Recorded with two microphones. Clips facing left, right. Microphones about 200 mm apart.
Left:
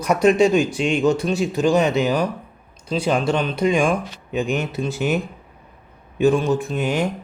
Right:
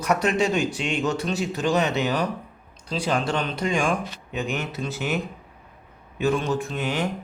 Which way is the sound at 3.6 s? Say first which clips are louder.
Left 6 dB; 20° left (ahead or behind).